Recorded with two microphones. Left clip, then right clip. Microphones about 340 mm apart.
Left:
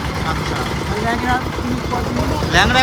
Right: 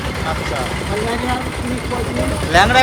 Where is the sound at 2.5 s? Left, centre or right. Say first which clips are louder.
Right 3 dB; centre.